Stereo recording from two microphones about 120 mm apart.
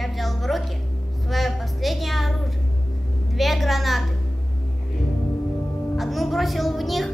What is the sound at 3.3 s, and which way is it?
Speech, centre (ahead or behind).